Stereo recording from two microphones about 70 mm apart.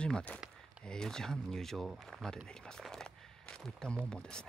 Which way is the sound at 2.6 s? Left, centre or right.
Centre.